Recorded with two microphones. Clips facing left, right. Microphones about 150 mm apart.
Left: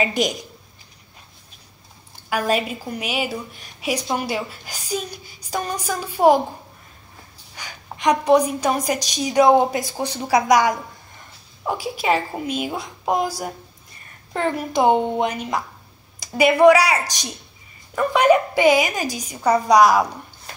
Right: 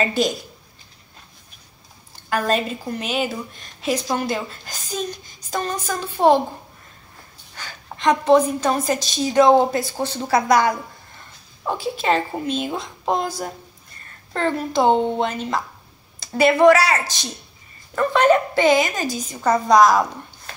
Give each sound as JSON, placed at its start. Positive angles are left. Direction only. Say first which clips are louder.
{"t": 0.0, "sound": "a woman's voice", "louder": "right 1 dB", "side_deg": 15}
{"t": 2.2, "sound": "a woman's voice", "louder": "even", "side_deg": 10}
{"t": 7.5, "sound": "a woman's voice", "louder": "even", "side_deg": 10}